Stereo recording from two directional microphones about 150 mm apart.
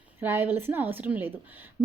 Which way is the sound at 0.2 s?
15° right (ahead or behind).